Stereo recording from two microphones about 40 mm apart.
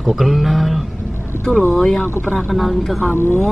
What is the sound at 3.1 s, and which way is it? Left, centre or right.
Speech, left.